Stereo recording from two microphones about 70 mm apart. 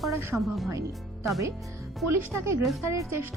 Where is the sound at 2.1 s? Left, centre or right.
Right.